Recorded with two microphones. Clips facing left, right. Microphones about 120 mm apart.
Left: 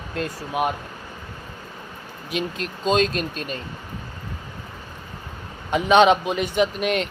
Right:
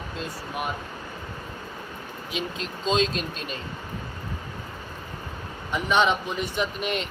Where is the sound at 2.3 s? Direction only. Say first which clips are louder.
Left 5 dB; 55° left (ahead or behind).